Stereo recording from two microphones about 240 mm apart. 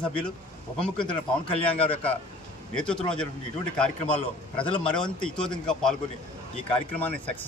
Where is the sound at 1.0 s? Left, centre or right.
Left.